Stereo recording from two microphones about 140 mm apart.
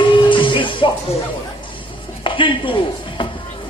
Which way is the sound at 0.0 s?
35° left (ahead or behind).